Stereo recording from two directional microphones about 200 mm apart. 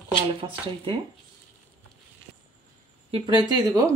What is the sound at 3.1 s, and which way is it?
Speech, 20° right (ahead or behind).